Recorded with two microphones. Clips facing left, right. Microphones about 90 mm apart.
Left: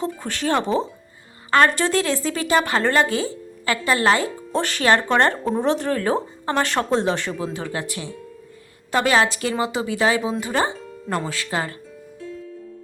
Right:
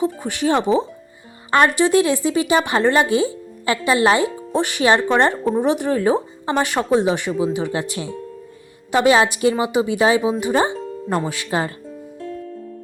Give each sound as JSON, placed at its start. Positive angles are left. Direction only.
{"t": 0.0, "sound": "a woman's voice", "side_deg": -15}
{"t": 12.2, "sound": "music", "side_deg": -50}